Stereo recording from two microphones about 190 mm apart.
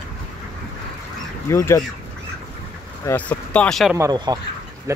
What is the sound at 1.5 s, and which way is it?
Speech, 15° left (ahead or behind).